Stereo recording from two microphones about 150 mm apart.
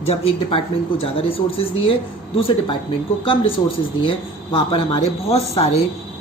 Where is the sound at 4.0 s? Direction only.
35° left (ahead or behind).